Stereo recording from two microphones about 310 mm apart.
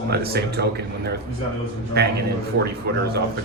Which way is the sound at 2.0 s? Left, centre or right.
Right.